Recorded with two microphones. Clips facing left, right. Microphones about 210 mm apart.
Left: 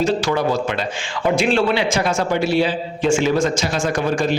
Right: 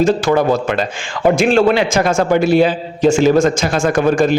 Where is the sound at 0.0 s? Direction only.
50° right (ahead or behind).